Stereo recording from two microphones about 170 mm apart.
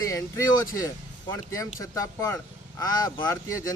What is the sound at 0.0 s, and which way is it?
A man's voice, 20° left (ahead or behind).